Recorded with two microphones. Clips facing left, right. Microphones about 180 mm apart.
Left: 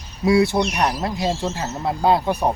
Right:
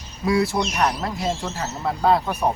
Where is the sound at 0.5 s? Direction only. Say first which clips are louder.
Left 2 dB; 25° left (ahead or behind).